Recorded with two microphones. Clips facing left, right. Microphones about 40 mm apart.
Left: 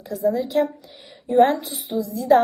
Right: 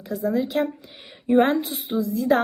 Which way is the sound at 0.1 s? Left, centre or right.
Right.